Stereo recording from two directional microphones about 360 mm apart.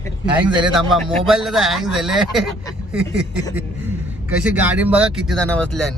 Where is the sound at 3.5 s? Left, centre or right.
Centre.